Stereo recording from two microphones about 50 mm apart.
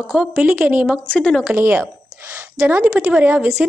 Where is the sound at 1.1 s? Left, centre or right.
Left.